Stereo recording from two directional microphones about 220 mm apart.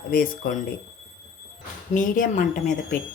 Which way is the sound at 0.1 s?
40° left (ahead or behind).